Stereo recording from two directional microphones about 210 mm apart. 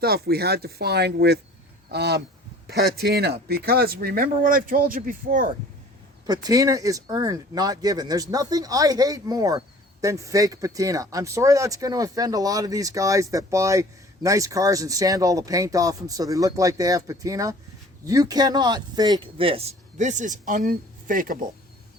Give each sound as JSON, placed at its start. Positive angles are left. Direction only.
{"t": 0.0, "sound": "speech", "side_deg": -50}
{"t": 6.2, "sound": "speech", "side_deg": -20}